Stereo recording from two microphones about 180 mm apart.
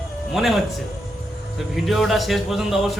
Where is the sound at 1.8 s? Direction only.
Centre (ahead or behind).